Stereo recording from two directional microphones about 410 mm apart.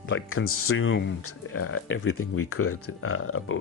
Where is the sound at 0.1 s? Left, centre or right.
Left.